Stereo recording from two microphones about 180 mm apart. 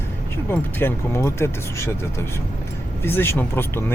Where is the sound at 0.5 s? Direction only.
10° left (ahead or behind).